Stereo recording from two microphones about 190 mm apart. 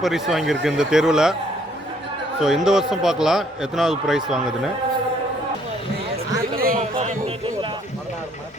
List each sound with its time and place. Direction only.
0.0 s a man's voice: centre (ahead or behind)
2.4 s a man's voice: 5° right (ahead or behind)
6.6 s a sound: 50° right (ahead or behind)
6.9 s music: 35° right (ahead or behind)